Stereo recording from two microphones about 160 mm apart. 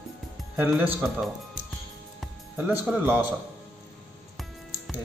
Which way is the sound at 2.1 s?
5° right (ahead or behind).